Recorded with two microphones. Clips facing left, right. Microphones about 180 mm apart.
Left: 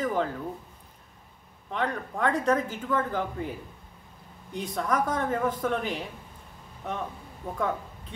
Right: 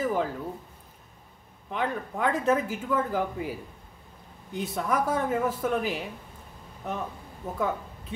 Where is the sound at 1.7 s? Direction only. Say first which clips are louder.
Even; 5° right (ahead or behind).